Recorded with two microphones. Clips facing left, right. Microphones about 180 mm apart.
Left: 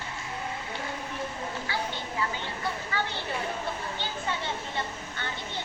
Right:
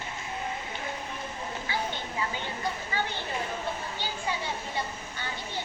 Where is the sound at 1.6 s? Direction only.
15° right (ahead or behind).